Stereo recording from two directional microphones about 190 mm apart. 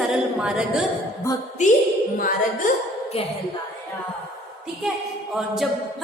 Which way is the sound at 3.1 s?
30° left (ahead or behind).